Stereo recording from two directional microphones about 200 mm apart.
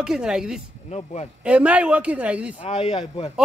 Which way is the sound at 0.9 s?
35° left (ahead or behind).